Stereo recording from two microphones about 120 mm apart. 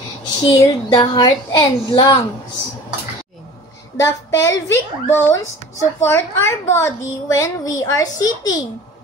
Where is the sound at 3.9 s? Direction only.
25° left (ahead or behind).